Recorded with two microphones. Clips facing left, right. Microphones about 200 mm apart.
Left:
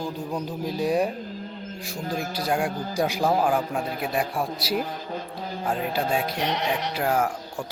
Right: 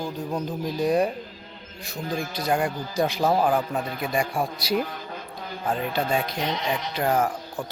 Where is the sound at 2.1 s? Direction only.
5° left (ahead or behind).